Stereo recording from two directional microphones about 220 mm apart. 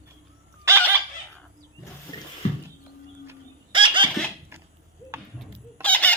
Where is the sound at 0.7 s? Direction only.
10° right (ahead or behind).